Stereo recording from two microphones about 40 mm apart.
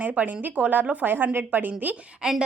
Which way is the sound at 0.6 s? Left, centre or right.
Right.